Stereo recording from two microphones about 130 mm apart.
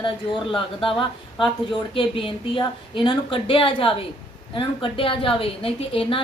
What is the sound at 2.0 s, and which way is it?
A woman's voice, 45° left (ahead or behind).